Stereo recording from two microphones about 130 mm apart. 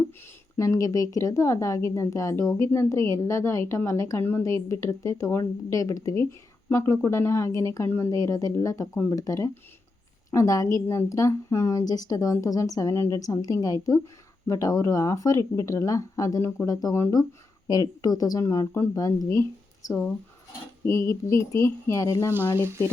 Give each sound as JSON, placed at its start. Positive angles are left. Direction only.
{"t": 0.5, "sound": "a woman's voice", "side_deg": 25}
{"t": 22.5, "sound": "speech", "side_deg": -20}